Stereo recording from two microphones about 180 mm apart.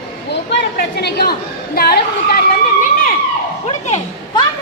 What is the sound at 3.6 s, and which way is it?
Speech, 35° left (ahead or behind).